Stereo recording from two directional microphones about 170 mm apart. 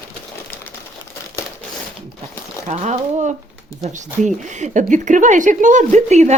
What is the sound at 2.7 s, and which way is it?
Speech, 45° right (ahead or behind).